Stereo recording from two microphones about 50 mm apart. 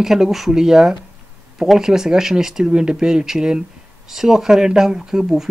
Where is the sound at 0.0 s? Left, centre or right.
Centre.